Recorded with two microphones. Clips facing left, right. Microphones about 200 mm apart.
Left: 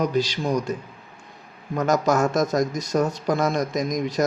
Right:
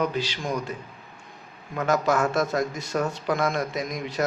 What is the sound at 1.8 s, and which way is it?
Speech, 40° left (ahead or behind).